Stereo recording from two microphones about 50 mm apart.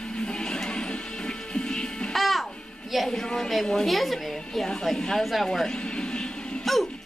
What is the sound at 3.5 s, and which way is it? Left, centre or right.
A woman's voice, centre.